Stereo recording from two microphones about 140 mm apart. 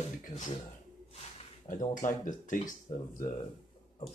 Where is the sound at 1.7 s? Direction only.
65° left (ahead or behind).